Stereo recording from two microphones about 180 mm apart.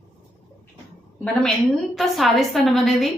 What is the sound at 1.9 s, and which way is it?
A woman's voice, centre (ahead or behind).